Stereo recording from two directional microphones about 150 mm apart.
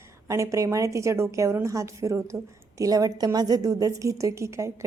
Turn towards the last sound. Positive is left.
turn(degrees=-20)  # may be behind; listen again after turning